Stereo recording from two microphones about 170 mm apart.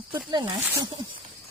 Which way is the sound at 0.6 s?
15° right (ahead or behind).